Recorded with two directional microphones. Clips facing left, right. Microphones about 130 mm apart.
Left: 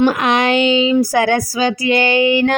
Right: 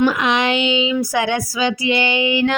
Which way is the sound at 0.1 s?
50° left (ahead or behind).